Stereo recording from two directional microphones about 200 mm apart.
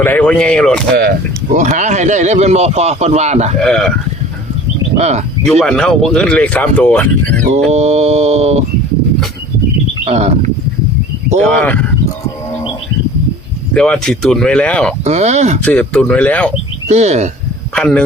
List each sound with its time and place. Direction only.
0.0 s speech: 10° left (ahead or behind)
1.5 s speech: 40° right (ahead or behind)
3.6 s speech: 5° left (ahead or behind)
4.9 s speech: 35° right (ahead or behind)
5.5 s speech: 5° left (ahead or behind)
7.7 s speech: 35° right (ahead or behind)
10.0 s a sound: 35° right (ahead or behind)
11.4 s speech: 5° left (ahead or behind)
13.7 s speech: 5° left (ahead or behind)
15.0 s speech: 35° right (ahead or behind)
15.6 s speech: 5° left (ahead or behind)
16.9 s speech: 35° right (ahead or behind)
17.7 s speech: 5° left (ahead or behind)